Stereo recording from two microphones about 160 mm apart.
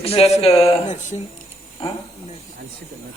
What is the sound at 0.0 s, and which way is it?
A man's voice, 40° left (ahead or behind).